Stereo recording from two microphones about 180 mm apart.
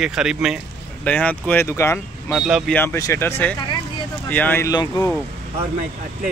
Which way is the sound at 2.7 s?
15° left (ahead or behind).